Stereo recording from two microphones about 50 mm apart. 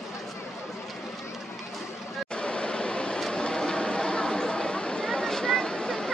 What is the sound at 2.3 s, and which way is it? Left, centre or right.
Vehicle, centre.